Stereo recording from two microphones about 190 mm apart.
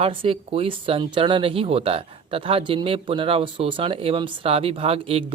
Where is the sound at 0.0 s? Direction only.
30° right (ahead or behind).